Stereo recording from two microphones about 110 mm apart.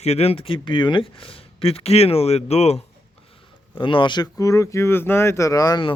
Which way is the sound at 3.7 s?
50° left (ahead or behind).